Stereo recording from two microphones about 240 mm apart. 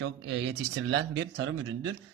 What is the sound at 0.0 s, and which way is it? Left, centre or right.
A man's voice, right.